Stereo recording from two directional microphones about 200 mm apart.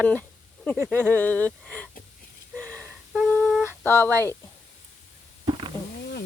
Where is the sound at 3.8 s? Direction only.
10° left (ahead or behind).